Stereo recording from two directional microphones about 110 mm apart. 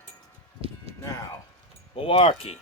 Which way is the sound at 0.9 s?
65° right (ahead or behind).